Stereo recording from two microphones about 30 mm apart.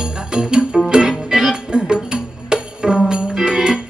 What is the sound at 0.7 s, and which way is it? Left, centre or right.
Music, right.